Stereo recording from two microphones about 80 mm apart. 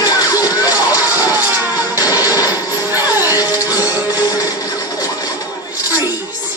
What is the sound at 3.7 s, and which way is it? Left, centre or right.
Music, right.